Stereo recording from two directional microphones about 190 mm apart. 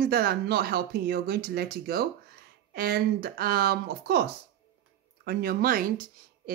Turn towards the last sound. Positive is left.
turn(degrees=-45)  # may be behind; listen again after turning